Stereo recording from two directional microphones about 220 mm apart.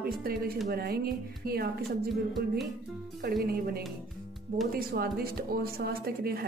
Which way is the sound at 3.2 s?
40° right (ahead or behind).